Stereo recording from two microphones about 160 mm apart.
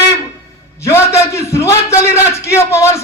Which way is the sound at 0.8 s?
15° left (ahead or behind).